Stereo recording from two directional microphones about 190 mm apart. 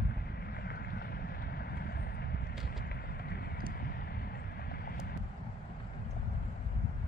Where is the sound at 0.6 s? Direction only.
55° left (ahead or behind).